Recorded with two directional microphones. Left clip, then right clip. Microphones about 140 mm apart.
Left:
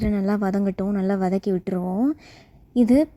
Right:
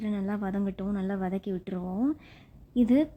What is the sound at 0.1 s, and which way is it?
Speech, 35° left (ahead or behind).